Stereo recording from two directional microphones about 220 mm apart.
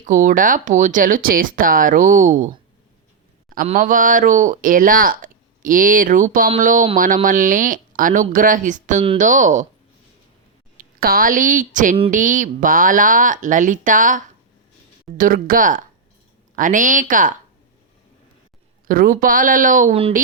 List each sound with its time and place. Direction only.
0.0 s speech: 35° right (ahead or behind)
10.8 s a woman's voice: 40° right (ahead or behind)
18.9 s speech: 40° right (ahead or behind)